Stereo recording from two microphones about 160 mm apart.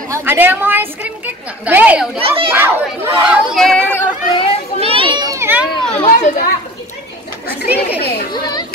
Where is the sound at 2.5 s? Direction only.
15° right (ahead or behind).